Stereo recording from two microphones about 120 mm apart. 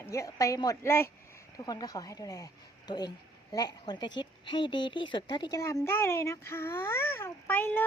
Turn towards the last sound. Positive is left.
turn(degrees=15)  # may be behind; listen again after turning